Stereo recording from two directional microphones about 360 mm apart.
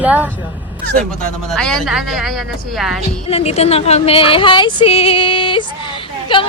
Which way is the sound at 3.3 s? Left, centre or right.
Centre.